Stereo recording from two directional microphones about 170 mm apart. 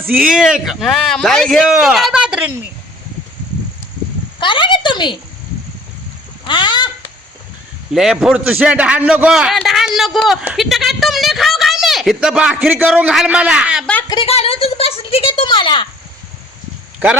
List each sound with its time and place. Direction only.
0.3 s a man's voice: 5° right (ahead or behind)
4.4 s a woman's voice: 30° left (ahead or behind)
6.5 s a sound: 25° left (ahead or behind)
7.9 s a man's voice: 5° right (ahead or behind)
14.1 s a woman's voice: 35° left (ahead or behind)